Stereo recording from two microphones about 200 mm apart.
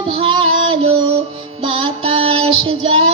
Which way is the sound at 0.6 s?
30° right (ahead or behind).